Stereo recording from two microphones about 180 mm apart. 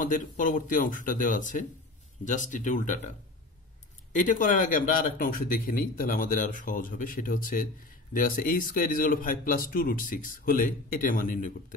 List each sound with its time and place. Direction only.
0.0 s speech: 45° left (ahead or behind)